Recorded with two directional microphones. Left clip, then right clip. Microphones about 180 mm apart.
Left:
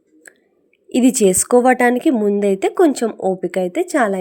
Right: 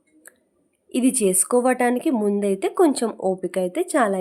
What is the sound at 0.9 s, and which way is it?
A woman's voice, 25° left (ahead or behind).